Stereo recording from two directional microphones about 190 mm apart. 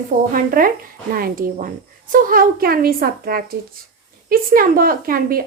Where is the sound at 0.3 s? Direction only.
50° right (ahead or behind).